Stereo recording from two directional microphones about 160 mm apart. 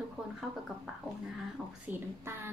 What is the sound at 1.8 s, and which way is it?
Speech, 15° right (ahead or behind).